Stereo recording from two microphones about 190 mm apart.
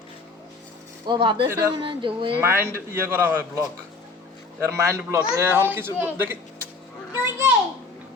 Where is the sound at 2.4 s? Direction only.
15° right (ahead or behind).